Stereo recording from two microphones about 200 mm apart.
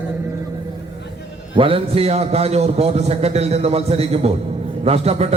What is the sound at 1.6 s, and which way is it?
A man's voice, 25° right (ahead or behind).